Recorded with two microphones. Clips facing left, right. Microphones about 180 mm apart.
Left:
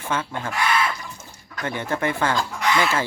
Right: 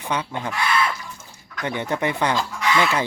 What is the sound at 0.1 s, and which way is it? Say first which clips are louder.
Speech: right 1 dB; 15° right (ahead or behind).